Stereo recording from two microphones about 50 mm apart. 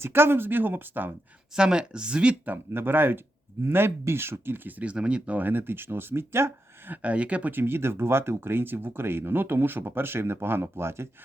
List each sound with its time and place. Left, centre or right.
0.0 s speech: right
1.5 s speech: centre
2.7 s speech: right
4.8 s speech: right
5.4 s speech: right
6.9 s speech: right
7.5 s speech: right